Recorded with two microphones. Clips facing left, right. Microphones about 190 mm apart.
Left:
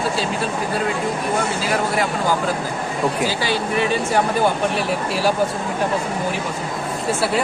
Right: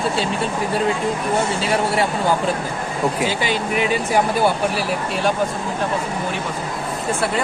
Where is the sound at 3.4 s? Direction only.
15° right (ahead or behind).